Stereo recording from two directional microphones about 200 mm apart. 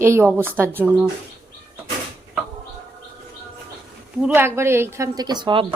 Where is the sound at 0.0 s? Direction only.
10° right (ahead or behind).